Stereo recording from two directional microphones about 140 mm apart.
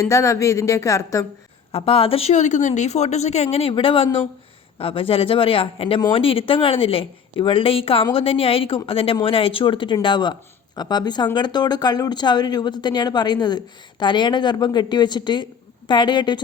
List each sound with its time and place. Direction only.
0.0 s a woman's voice: 20° left (ahead or behind)
1.7 s a woman's voice: 45° left (ahead or behind)